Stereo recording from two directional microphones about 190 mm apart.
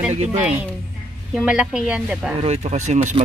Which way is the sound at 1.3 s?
5° right (ahead or behind).